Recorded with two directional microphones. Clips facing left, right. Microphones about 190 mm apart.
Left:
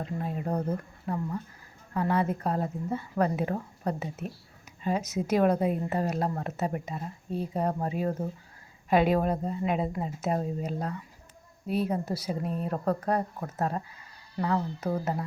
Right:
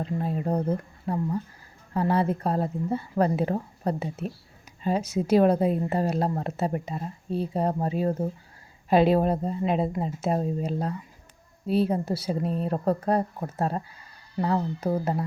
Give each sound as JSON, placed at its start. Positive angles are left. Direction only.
{"t": 0.0, "sound": "a woman's voice", "side_deg": -30}